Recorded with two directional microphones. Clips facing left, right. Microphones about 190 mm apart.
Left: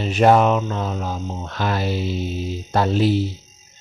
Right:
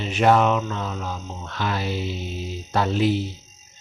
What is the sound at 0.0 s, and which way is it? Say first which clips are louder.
Music: left 3 dB; 40° left (ahead or behind).